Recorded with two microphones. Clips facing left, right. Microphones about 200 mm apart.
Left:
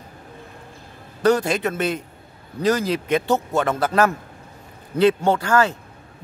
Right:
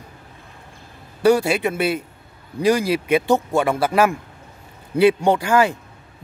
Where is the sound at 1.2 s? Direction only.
10° right (ahead or behind).